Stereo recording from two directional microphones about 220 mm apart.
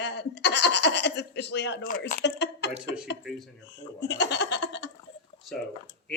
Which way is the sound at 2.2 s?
50° left (ahead or behind).